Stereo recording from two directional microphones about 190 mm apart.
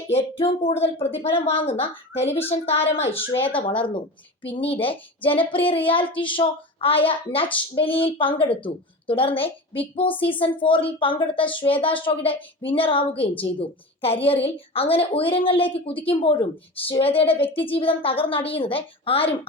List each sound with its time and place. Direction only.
0.1 s a woman's voice: 30° left (ahead or behind)